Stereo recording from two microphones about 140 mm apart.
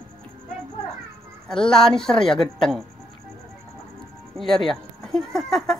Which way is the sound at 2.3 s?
35° left (ahead or behind).